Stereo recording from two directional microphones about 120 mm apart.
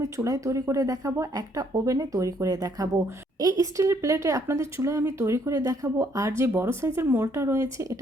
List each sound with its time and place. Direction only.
0.0 s a woman's voice: 25° right (ahead or behind)